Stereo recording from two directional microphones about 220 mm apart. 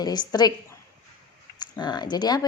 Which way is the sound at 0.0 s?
20° left (ahead or behind).